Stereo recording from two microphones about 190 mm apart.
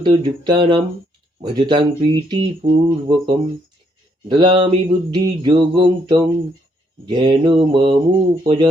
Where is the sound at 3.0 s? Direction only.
25° right (ahead or behind).